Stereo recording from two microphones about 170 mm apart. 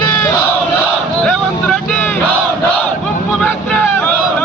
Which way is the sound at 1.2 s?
5° left (ahead or behind).